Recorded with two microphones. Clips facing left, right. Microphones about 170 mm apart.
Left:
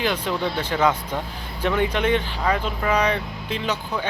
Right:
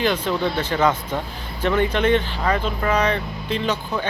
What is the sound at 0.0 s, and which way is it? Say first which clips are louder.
Speech: right 3 dB; 10° left (ahead or behind).